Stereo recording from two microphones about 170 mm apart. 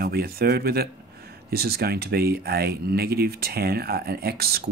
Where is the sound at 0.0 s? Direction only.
65° right (ahead or behind).